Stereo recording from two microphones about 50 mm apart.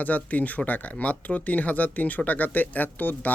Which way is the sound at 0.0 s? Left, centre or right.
Left.